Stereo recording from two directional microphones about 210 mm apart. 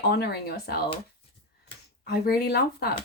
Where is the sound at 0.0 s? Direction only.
50° left (ahead or behind).